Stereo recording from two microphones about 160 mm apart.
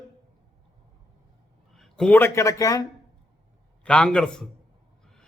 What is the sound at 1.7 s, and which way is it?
Speech, 5° left (ahead or behind).